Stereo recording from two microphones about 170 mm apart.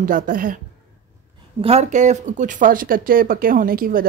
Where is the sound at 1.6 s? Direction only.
40° right (ahead or behind).